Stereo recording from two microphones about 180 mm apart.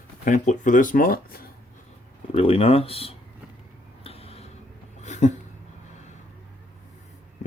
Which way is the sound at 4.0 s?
35° left (ahead or behind).